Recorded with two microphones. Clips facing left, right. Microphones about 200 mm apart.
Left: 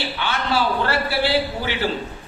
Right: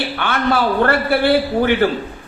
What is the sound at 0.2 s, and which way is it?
A man's voice, 55° right (ahead or behind).